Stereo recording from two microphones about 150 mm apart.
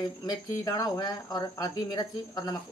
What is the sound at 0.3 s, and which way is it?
Speech, 25° left (ahead or behind).